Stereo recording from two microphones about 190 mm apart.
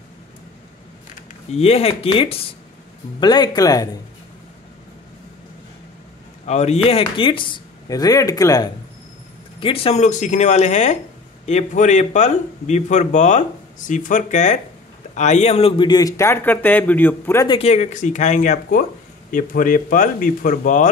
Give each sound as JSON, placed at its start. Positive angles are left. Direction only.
{"t": 1.5, "sound": "speech", "side_deg": 30}
{"t": 6.4, "sound": "speech", "side_deg": 35}
{"t": 9.6, "sound": "speech", "side_deg": 30}
{"t": 17.5, "sound": "speech", "side_deg": 30}